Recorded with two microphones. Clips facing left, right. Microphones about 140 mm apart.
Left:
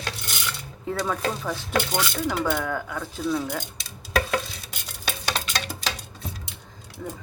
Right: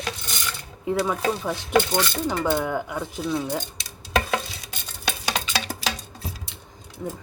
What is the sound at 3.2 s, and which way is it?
Speech, centre (ahead or behind).